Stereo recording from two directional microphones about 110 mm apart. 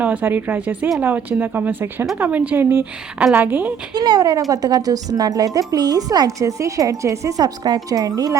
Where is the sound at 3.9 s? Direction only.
40° right (ahead or behind).